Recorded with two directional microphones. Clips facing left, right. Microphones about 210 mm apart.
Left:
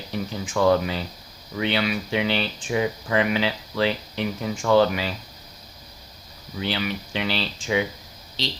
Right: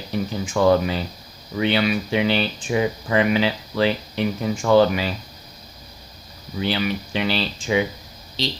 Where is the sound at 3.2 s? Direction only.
40° right (ahead or behind).